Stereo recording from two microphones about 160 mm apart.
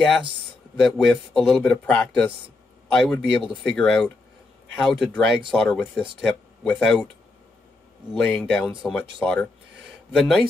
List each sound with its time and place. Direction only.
0.7 s a man's voice: centre (ahead or behind)
8.1 s a man's voice: 5° left (ahead or behind)